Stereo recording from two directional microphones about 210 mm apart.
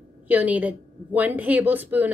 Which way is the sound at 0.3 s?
5° right (ahead or behind).